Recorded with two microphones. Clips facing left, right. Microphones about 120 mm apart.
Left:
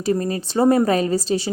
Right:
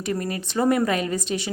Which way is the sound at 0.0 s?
30° left (ahead or behind).